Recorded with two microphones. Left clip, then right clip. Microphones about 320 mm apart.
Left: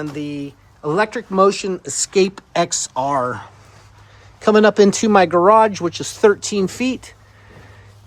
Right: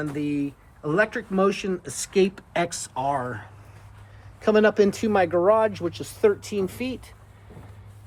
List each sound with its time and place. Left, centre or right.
0.0 s speech: centre; by 7.1 s left